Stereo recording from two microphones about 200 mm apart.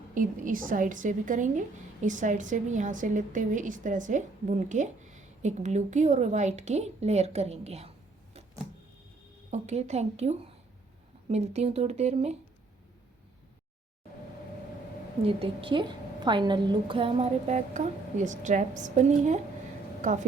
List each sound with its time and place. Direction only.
0.1 s a woman's voice: 40° right (ahead or behind)
9.5 s a woman's voice: 35° right (ahead or behind)
15.3 s a woman's voice: 25° right (ahead or behind)